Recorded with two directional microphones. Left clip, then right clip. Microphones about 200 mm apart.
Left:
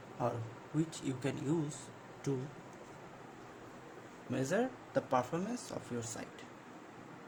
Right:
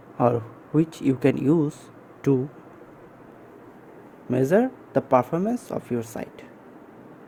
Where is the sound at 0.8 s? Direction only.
40° right (ahead or behind).